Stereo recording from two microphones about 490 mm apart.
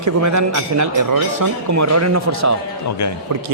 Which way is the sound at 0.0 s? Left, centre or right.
Right.